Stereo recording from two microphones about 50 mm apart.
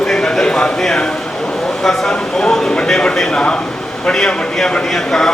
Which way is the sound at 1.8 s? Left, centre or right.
Centre.